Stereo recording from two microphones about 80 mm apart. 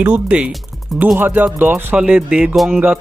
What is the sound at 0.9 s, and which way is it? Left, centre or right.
Speech, centre.